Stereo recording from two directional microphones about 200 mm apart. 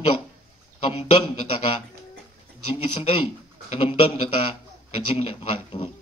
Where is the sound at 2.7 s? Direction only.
30° left (ahead or behind).